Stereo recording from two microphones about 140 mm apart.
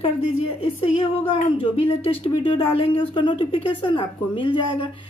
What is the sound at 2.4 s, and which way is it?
A woman's voice, 40° left (ahead or behind).